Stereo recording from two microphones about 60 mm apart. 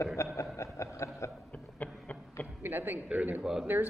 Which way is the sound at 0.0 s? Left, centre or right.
Left.